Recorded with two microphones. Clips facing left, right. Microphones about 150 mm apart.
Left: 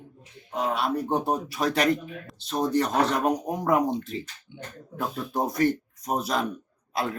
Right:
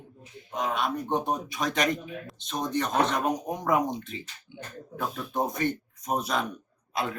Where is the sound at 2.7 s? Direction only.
35° left (ahead or behind).